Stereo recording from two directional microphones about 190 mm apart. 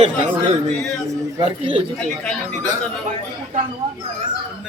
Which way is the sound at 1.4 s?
30° right (ahead or behind).